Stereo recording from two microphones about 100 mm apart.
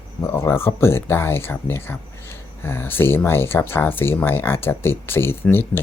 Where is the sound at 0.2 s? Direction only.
25° left (ahead or behind).